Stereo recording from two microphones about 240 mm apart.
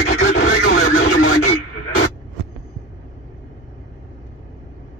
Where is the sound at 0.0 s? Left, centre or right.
Left.